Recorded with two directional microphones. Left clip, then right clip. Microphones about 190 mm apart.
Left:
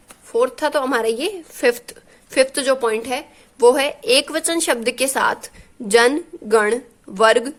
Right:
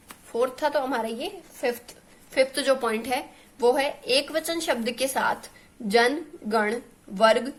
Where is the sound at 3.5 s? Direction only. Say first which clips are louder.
Left 8 dB; 35° left (ahead or behind).